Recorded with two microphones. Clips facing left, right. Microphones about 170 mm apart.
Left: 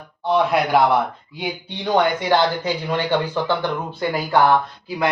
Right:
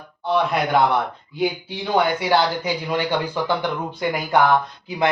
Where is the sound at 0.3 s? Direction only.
5° left (ahead or behind).